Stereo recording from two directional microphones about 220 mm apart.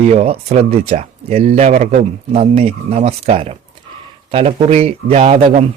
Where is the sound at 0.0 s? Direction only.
30° right (ahead or behind).